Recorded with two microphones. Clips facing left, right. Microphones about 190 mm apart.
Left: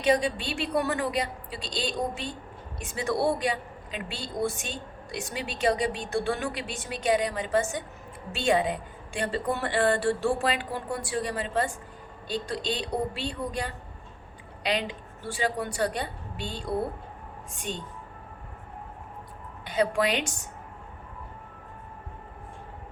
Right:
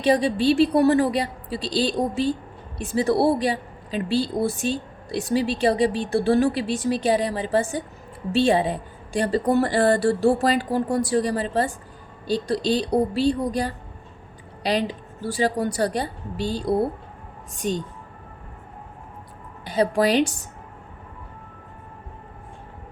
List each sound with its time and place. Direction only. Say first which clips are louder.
0.0 s a woman's voice: right 6 dB; 35° right (ahead or behind)
19.6 s a woman's voice: right 5 dB; 35° right (ahead or behind)